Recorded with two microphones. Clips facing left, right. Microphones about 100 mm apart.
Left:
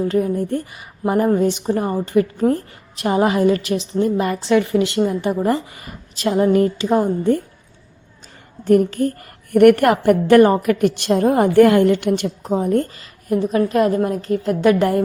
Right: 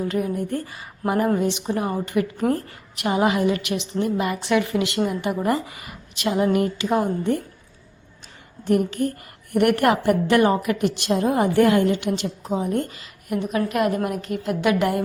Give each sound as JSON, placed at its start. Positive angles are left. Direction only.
{"t": 0.0, "sound": "a woman's voice", "side_deg": 35}
{"t": 0.5, "sound": "speech", "side_deg": 25}
{"t": 1.4, "sound": "a woman's voice", "side_deg": 40}
{"t": 8.6, "sound": "a woman's voice", "side_deg": 40}
{"t": 12.5, "sound": "a woman's voice", "side_deg": 40}